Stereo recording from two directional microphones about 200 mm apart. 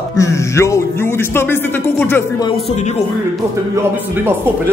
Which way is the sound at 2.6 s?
35° left (ahead or behind).